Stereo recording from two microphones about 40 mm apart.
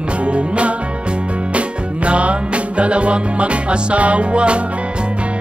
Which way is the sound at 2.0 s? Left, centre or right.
Right.